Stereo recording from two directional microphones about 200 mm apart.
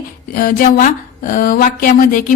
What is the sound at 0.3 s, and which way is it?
A woman's voice, 45° left (ahead or behind).